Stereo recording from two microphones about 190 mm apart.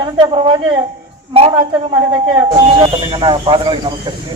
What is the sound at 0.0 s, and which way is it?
Speech, 25° right (ahead or behind).